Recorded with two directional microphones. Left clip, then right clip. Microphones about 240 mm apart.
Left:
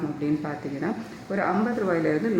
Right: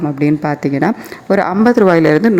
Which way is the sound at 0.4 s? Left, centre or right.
Right.